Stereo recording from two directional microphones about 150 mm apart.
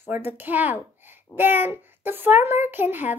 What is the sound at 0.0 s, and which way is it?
A child's voice, 15° right (ahead or behind).